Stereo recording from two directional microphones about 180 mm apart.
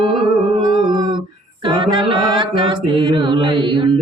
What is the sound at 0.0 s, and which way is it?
Music, 25° right (ahead or behind).